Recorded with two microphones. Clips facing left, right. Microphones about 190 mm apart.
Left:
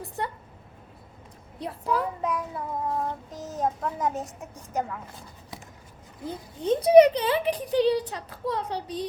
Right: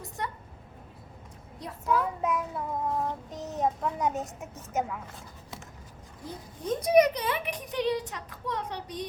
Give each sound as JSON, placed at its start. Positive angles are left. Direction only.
{"t": 0.2, "sound": "a woman's voice", "side_deg": 30}
{"t": 1.5, "sound": "a woman's voice", "side_deg": 30}
{"t": 1.9, "sound": "a child's voice", "side_deg": 0}
{"t": 6.2, "sound": "a woman's voice", "side_deg": 30}